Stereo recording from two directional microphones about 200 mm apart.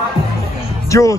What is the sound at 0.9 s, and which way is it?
Speech, 15° left (ahead or behind).